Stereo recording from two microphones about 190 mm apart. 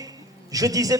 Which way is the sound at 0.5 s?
20° right (ahead or behind).